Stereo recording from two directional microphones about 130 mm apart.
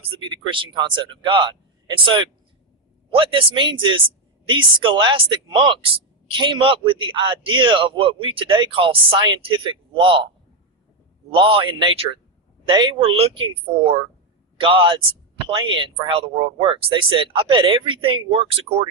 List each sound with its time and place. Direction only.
0.2 s a man's voice: 40° right (ahead or behind)
11.3 s a man's voice: 40° right (ahead or behind)